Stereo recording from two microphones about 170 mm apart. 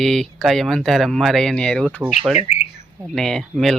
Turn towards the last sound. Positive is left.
turn(degrees=0)  # may be behind; listen again after turning